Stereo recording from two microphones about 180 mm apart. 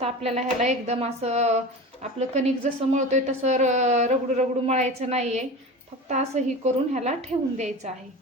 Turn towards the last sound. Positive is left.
turn(degrees=-40)  # may be behind; listen again after turning